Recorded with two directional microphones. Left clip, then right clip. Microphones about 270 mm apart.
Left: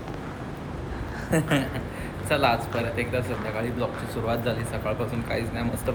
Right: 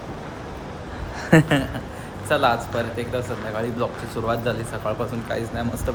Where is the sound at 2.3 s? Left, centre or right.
Centre.